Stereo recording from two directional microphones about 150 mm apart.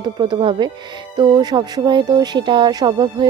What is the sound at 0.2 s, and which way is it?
Speech, 35° right (ahead or behind).